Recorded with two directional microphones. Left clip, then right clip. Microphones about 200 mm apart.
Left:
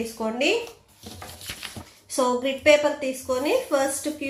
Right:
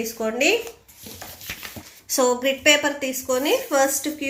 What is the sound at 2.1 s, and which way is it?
Speech, 25° right (ahead or behind).